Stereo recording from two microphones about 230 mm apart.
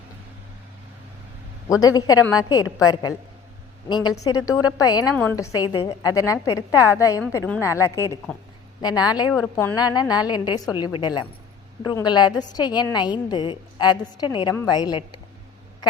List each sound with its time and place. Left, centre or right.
2.0 s a woman's voice: centre
5.5 s a woman's voice: centre
9.3 s a woman's voice: centre